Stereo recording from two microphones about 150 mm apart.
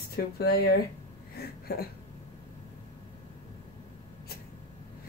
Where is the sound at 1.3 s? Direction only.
90° left.